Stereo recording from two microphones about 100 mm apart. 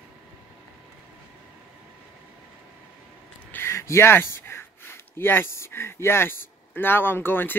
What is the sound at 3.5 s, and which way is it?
Speech, 25° left (ahead or behind).